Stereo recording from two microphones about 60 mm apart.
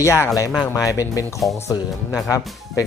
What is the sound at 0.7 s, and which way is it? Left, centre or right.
Speech, left.